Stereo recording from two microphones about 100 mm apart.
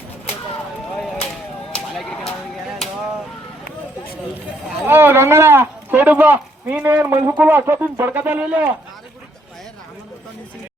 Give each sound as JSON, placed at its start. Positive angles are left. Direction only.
{"t": 1.7, "sound": "clip-clop", "side_deg": 10}
{"t": 4.9, "sound": "speech", "side_deg": -20}
{"t": 7.1, "sound": "speech", "side_deg": -30}